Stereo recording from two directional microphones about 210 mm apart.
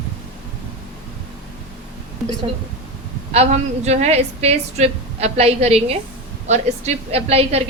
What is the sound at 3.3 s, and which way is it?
A woman's voice, 35° right (ahead or behind).